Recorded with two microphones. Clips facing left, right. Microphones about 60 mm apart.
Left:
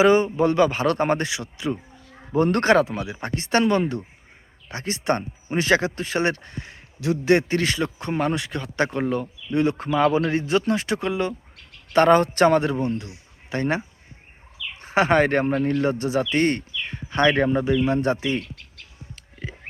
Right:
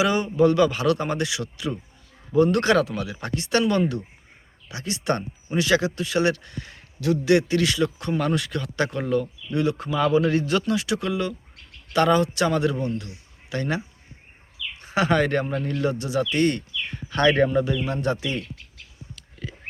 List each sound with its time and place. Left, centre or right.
0.0 s speech: left
10.6 s speech: left
19.1 s whispering: left